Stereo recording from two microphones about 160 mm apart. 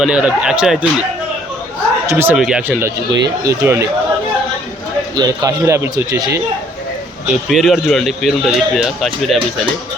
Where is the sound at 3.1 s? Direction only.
90° right.